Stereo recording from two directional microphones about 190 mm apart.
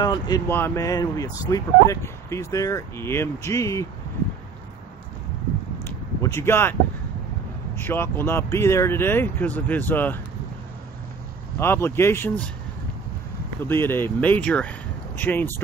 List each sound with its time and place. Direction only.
0.0 s speech: 20° left (ahead or behind)
5.9 s a sound: 15° left (ahead or behind)
7.7 s speech: 10° left (ahead or behind)
11.5 s speech: 10° left (ahead or behind)
13.7 s speech: 10° left (ahead or behind)